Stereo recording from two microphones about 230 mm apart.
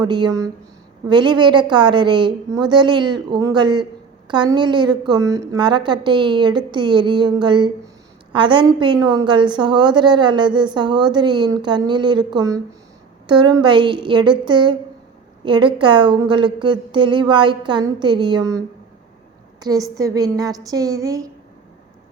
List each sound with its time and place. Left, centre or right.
0.0 s a woman's voice: centre